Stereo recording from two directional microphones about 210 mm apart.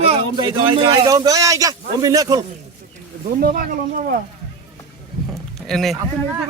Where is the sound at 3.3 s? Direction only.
40° right (ahead or behind).